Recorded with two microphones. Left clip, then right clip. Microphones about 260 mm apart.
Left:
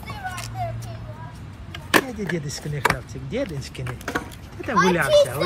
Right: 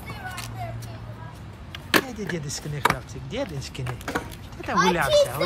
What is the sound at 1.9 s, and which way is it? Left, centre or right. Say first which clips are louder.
Speech: left 3 dB; centre.